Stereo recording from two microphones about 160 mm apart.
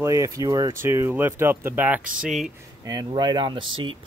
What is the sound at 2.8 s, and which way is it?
Speech, 25° right (ahead or behind).